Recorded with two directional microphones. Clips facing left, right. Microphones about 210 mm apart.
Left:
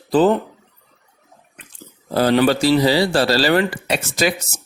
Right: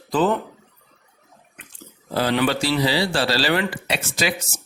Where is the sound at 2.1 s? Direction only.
40° left (ahead or behind).